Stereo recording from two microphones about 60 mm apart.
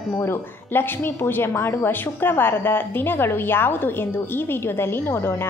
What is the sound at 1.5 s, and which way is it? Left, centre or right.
Speech, left.